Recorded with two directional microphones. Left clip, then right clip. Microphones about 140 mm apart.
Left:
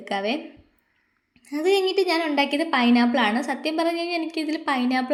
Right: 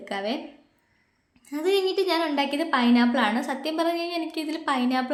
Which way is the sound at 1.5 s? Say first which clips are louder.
Left 3 dB; 15° left (ahead or behind).